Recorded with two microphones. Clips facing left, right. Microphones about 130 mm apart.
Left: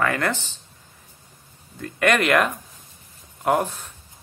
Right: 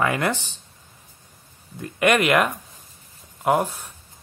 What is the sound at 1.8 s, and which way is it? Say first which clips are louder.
Speech: right 1 dB; 15° right (ahead or behind).